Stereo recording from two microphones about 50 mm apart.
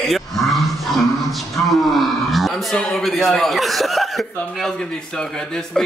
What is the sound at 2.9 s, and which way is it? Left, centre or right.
Speech, centre.